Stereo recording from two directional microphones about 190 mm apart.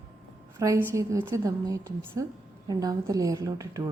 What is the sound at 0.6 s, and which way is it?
A woman's voice, 15° right (ahead or behind).